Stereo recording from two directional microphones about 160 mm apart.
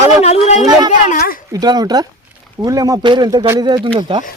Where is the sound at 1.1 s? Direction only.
60° left (ahead or behind).